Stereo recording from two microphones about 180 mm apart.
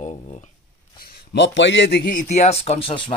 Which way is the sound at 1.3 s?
75° left (ahead or behind).